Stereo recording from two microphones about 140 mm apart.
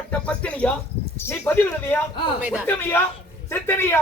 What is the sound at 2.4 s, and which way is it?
Speech, 10° right (ahead or behind).